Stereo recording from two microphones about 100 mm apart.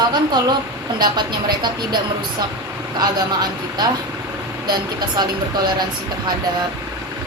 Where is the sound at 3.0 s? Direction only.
45° right (ahead or behind).